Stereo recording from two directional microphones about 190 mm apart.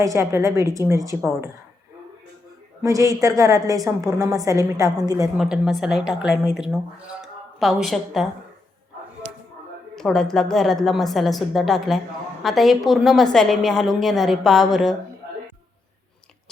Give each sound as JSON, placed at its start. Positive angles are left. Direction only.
{"t": 0.0, "sound": "a woman's voice", "side_deg": -15}
{"t": 2.8, "sound": "a woman's voice", "side_deg": -15}
{"t": 5.4, "sound": "a woman's voice", "side_deg": 0}
{"t": 9.9, "sound": "a woman's voice", "side_deg": 5}